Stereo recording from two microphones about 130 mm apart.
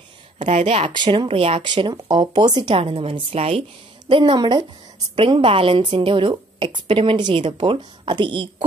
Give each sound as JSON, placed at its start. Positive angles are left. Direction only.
{"t": 0.4, "sound": "a woman's voice", "side_deg": -60}
{"t": 0.9, "sound": "speech", "side_deg": -40}
{"t": 2.8, "sound": "a woman's voice", "side_deg": -50}
{"t": 4.1, "sound": "speech", "side_deg": -35}